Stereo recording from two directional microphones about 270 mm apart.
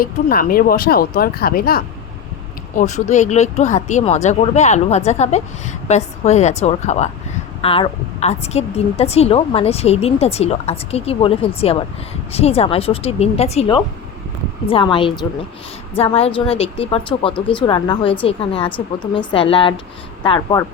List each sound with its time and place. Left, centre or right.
0.0 s speech: left; by 20.7 s centre